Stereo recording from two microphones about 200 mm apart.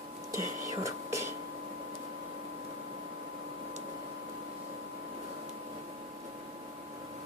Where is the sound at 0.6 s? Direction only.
15° right (ahead or behind).